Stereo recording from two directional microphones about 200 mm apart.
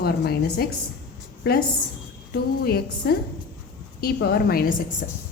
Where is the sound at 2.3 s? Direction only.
50° left (ahead or behind).